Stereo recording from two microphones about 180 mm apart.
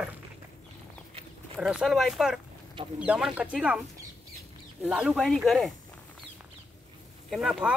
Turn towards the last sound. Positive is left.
turn(degrees=-5)  # may be behind; listen again after turning